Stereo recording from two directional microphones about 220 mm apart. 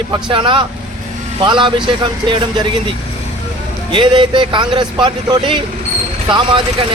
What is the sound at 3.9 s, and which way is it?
A man's voice, 20° right (ahead or behind).